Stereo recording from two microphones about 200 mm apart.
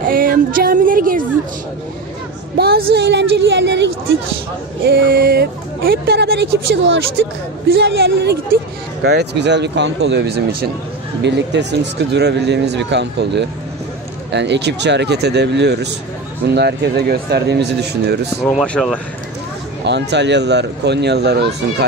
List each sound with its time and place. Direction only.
0.1 s a sound: 45° right (ahead or behind)
2.5 s speech: 50° right (ahead or behind)
4.8 s speech: 50° right (ahead or behind)
18.6 s speech: centre (ahead or behind)
19.8 s speech: 60° right (ahead or behind)